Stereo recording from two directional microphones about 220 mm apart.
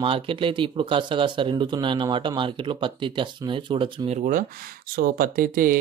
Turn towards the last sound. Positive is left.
turn(degrees=-40)  # may be behind; listen again after turning